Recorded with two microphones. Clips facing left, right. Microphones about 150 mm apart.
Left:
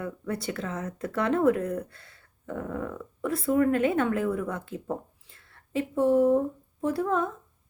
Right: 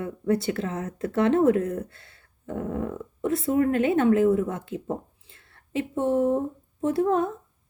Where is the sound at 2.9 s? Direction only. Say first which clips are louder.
Right 4 dB; 40° right (ahead or behind).